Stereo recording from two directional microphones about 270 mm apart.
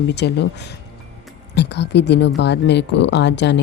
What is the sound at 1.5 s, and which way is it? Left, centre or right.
Speech, left.